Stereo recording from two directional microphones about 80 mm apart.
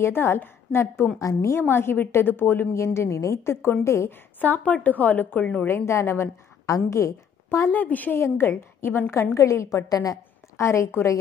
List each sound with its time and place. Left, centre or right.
0.0 s a woman's voice: left
4.4 s a woman's voice: centre
5.7 s a woman's voice: left
7.7 s a woman's voice: left
10.6 s a woman's voice: left